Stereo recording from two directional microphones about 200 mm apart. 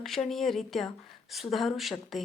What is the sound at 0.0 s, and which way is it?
A woman's voice, centre (ahead or behind).